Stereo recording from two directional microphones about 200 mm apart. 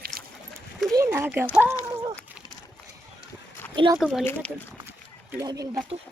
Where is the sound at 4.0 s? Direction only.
5° right (ahead or behind).